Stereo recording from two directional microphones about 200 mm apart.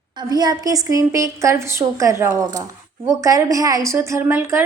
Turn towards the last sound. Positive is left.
turn(degrees=-10)  # may be behind; listen again after turning